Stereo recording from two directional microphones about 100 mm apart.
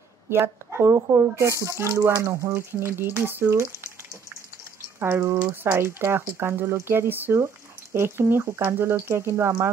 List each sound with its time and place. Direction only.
0.3 s speech: 25° right (ahead or behind)
5.0 s speech: 25° right (ahead or behind)